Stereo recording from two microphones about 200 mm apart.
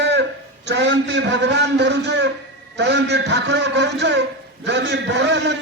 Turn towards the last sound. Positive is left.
turn(degrees=-60)  # may be behind; listen again after turning